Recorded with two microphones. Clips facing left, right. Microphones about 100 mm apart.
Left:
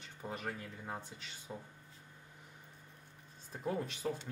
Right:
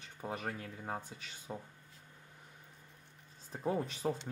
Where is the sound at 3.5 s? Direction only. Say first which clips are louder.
Right 3 dB; 25° right (ahead or behind).